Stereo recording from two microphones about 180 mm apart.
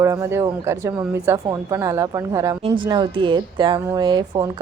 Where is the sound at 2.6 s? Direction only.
30° right (ahead or behind).